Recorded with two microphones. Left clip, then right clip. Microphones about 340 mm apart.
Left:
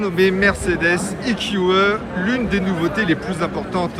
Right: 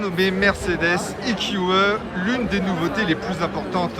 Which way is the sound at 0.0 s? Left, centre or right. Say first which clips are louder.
Left 3 dB; centre.